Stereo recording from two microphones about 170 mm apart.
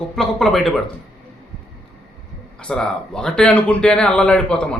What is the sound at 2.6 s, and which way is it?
A man's voice, 5° left (ahead or behind).